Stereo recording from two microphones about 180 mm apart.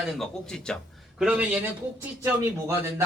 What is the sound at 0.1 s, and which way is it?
A man's voice, centre (ahead or behind).